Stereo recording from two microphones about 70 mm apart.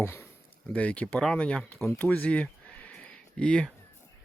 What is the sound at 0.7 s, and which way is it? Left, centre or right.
Speech, centre.